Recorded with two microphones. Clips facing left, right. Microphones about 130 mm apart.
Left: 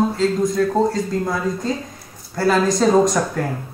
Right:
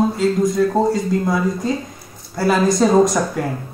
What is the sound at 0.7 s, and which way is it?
Speech, 10° right (ahead or behind).